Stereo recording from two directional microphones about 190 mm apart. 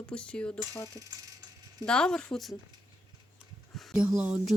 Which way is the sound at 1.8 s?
5° left (ahead or behind).